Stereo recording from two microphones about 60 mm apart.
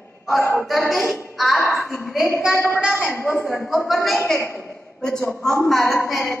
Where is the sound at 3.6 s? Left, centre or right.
Centre.